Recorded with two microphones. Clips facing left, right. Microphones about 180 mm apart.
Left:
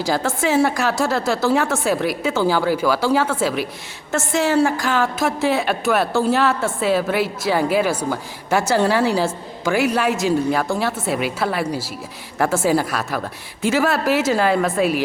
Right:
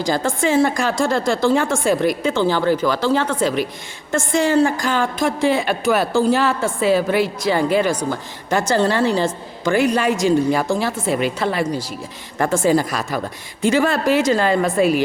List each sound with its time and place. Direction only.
0.0 s a woman's voice: 5° left (ahead or behind)